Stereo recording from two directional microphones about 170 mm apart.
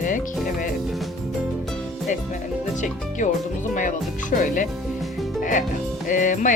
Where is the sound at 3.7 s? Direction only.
50° left (ahead or behind).